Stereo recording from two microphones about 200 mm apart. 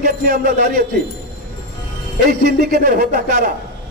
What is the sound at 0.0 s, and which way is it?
Speech, 45° right (ahead or behind).